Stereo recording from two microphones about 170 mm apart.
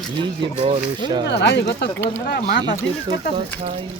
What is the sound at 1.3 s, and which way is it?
Speech, 90° left.